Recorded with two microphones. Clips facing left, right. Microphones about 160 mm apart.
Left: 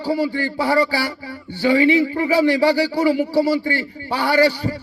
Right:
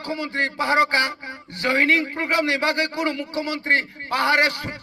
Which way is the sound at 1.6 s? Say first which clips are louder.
Left 7 dB; 30° left (ahead or behind).